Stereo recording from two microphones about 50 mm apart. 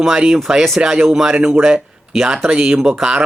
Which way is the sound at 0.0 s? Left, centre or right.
Centre.